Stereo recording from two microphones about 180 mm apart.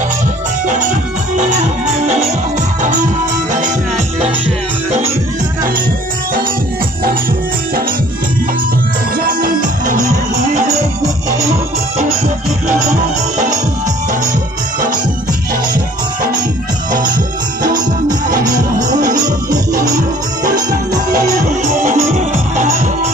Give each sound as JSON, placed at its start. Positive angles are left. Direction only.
{"t": 2.8, "sound": "music", "side_deg": -45}
{"t": 9.1, "sound": "music", "side_deg": -50}
{"t": 18.4, "sound": "music", "side_deg": -20}
{"t": 21.1, "sound": "music", "side_deg": -50}